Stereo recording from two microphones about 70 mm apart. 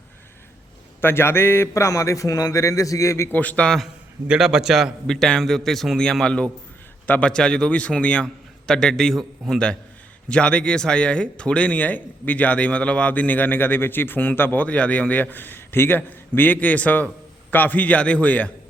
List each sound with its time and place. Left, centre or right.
1.0 s a man's voice: left
3.3 s speech: left
4.3 s a man's voice: centre
10.2 s speech: centre